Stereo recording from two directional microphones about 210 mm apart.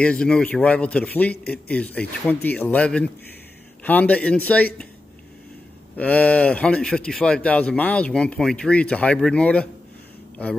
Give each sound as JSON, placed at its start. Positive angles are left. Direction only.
{"t": 0.0, "sound": "a man's voice", "side_deg": 5}
{"t": 5.9, "sound": "speech", "side_deg": 5}